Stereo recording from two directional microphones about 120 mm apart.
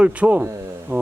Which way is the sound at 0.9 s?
20° right (ahead or behind).